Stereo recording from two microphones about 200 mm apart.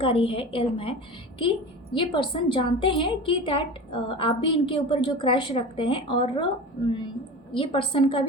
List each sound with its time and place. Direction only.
0.0 s a woman's voice: 25° left (ahead or behind)